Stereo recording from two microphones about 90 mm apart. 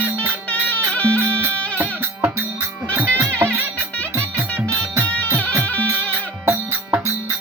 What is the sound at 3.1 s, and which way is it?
Music, 25° right (ahead or behind).